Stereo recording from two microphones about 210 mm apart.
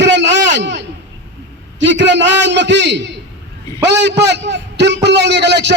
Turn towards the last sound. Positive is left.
turn(degrees=-55)  # may be behind; listen again after turning